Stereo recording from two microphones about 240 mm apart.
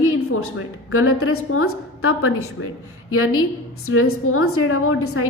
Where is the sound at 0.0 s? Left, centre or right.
Left.